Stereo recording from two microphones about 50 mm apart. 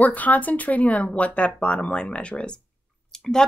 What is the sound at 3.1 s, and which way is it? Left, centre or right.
Clicking, centre.